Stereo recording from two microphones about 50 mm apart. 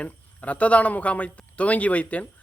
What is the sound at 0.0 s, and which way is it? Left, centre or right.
Speech, left.